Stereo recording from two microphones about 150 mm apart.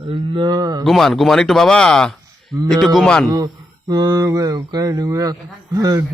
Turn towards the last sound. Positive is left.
turn(degrees=-25)  # may be behind; listen again after turning